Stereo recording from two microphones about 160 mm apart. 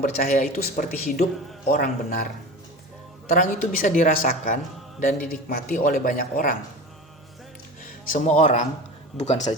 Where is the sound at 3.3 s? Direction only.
55° left (ahead or behind).